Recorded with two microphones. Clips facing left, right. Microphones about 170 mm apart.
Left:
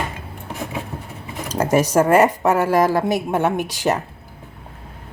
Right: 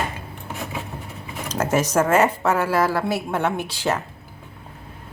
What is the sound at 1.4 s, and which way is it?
A woman's voice, 10° left (ahead or behind).